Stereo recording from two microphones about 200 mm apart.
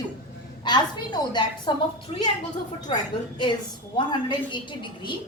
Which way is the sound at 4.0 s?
25° left (ahead or behind).